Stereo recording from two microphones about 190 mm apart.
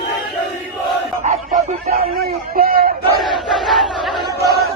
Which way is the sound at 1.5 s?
40° right (ahead or behind).